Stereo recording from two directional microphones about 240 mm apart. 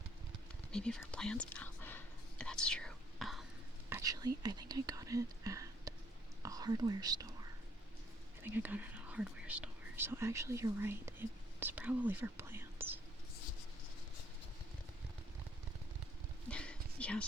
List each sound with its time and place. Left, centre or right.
0.7 s whispering: centre
3.8 s speech: centre
8.5 s speech: centre
16.5 s a sound: centre